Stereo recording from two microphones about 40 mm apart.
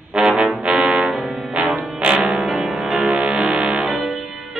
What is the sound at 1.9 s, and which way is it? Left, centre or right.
Music, right.